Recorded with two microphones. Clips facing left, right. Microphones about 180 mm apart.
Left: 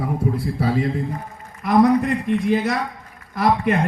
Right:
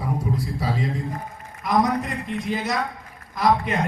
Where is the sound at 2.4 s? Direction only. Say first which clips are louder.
Left 5 dB; 55° left (ahead or behind).